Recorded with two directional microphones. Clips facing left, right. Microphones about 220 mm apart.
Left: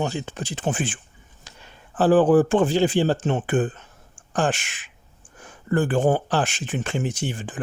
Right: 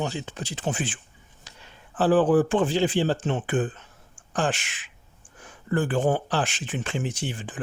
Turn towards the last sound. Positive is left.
turn(degrees=45)  # may be behind; listen again after turning